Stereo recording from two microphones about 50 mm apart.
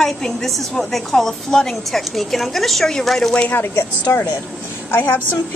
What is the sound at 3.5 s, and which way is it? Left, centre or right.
Speech, left.